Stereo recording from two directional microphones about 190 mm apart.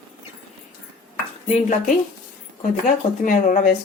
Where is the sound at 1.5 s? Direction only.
40° left (ahead or behind).